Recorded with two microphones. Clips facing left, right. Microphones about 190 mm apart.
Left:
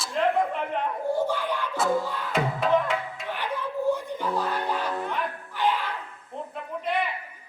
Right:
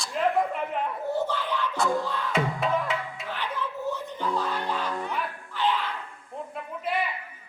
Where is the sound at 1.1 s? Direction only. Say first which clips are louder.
Left 2 dB; 10° left (ahead or behind).